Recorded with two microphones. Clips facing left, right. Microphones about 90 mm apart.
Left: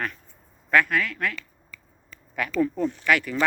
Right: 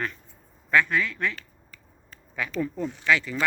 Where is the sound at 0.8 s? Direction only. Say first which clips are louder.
Left 1 dB; 5° left (ahead or behind).